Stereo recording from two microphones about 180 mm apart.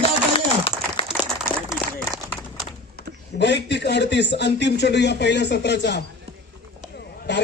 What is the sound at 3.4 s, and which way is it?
Speech, 70° left (ahead or behind).